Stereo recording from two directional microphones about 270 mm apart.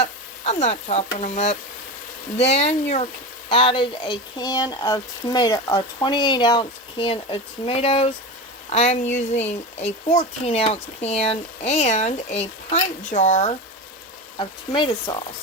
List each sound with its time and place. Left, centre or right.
0.0 s stir: left
1.1 s speech: left